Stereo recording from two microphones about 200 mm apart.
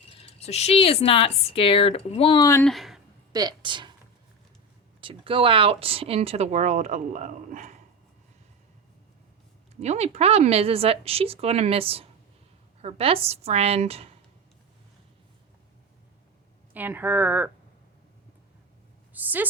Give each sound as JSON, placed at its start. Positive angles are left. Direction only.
{"t": 0.3, "sound": "speech", "side_deg": 30}
{"t": 2.5, "sound": "speech", "side_deg": 10}
{"t": 2.7, "sound": "a sound", "side_deg": 0}
{"t": 3.3, "sound": "speech", "side_deg": -20}
{"t": 4.9, "sound": "speech", "side_deg": -25}
{"t": 9.8, "sound": "speech", "side_deg": -35}
{"t": 16.7, "sound": "speech", "side_deg": -10}
{"t": 19.1, "sound": "a woman's voice", "side_deg": -10}